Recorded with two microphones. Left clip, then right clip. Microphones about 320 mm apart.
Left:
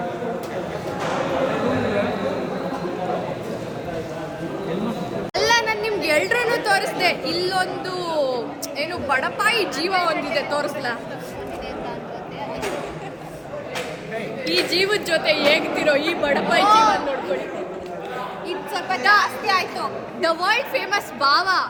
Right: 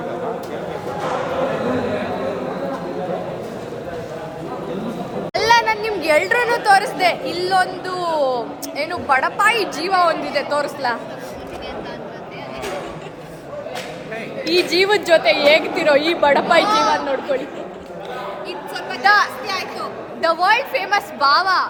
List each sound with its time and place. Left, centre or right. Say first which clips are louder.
5.3 s a sound: right 4 dB; centre
6.7 s speech: right 5 dB; centre
14.5 s a woman's voice: right 4 dB; centre
16.6 s speech: left 2 dB; centre
19.0 s speech: right 3 dB; centre
19.5 s a sound: left 3 dB; left
20.2 s speech: right 4 dB; centre